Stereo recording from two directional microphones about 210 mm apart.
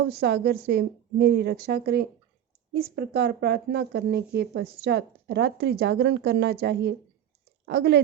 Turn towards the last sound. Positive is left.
turn(degrees=-50)  # may be behind; listen again after turning